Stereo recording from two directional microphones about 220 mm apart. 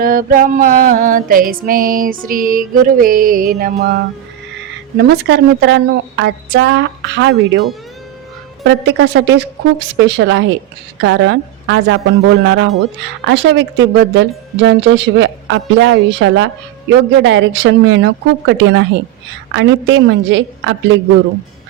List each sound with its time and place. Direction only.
0.0 s music: 40° right (ahead or behind)
4.9 s speech: 50° right (ahead or behind)
8.6 s speech: 55° right (ahead or behind)